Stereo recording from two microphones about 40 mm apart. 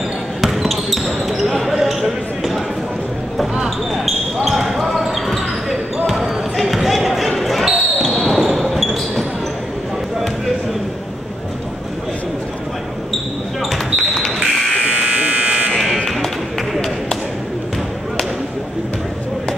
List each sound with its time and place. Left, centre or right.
0.4 s basketball bounce: centre
4.5 s basketball bounce: centre
7.6 s basketball bounce: centre
8.5 s a sound: centre
13.9 s basketball bounce: centre
14.8 s electric shaver: right
16.7 s tap: centre